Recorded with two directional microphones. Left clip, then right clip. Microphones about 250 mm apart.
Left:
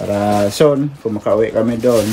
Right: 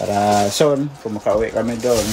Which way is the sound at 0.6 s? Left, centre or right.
Centre.